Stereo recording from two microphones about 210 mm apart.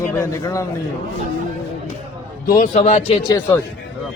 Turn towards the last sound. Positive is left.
turn(degrees=10)  # may be behind; listen again after turning